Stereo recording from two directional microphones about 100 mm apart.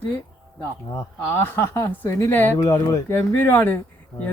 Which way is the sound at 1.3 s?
25° left (ahead or behind).